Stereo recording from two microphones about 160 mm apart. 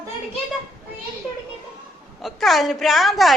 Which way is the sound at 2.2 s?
Centre (ahead or behind).